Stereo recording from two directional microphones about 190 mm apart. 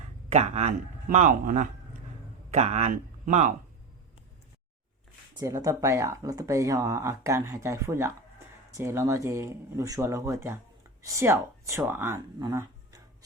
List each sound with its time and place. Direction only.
0.3 s speech: 35° right (ahead or behind)
5.4 s speech: 15° right (ahead or behind)